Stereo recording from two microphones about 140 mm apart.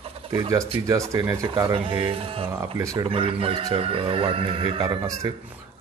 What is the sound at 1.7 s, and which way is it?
Chicken, 35° right (ahead or behind).